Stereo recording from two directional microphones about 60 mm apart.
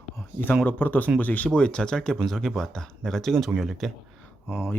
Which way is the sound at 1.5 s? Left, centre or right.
Centre.